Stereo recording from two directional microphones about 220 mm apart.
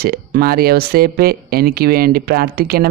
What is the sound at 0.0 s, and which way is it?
A man's voice, 45° right (ahead or behind).